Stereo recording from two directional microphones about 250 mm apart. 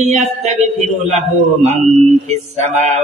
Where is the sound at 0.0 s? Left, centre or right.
Right.